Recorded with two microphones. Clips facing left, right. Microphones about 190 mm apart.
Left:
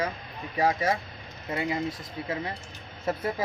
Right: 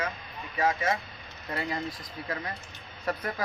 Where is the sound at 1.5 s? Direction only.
15° left (ahead or behind).